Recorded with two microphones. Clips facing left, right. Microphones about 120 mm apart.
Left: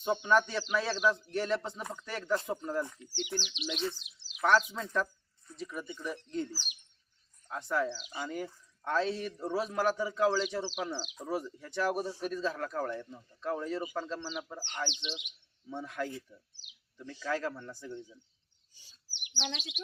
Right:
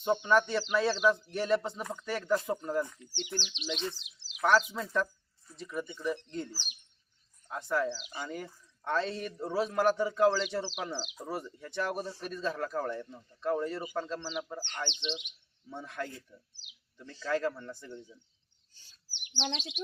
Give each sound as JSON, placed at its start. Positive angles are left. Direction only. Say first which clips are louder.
{"t": 0.0, "sound": "speech", "louder": "right 1 dB", "side_deg": 0}
{"t": 12.0, "sound": "a man's voice", "louder": "left 4 dB", "side_deg": 10}
{"t": 12.3, "sound": "speech", "louder": "even", "side_deg": 0}
{"t": 17.1, "sound": "a man's voice", "louder": "left 1 dB", "side_deg": 15}
{"t": 17.3, "sound": "speech", "louder": "right 5 dB", "side_deg": 0}
{"t": 18.7, "sound": "bird", "louder": "even", "side_deg": 15}
{"t": 19.4, "sound": "speech", "louder": "right 3 dB", "side_deg": -35}